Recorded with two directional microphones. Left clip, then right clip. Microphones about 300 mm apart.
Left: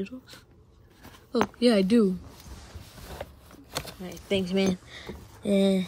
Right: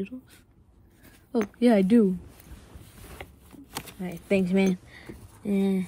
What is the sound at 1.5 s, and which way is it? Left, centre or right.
Speech, centre.